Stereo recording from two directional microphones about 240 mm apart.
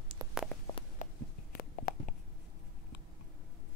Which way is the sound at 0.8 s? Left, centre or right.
Left.